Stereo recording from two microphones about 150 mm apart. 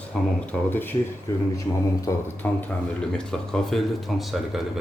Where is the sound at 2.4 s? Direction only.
10° left (ahead or behind).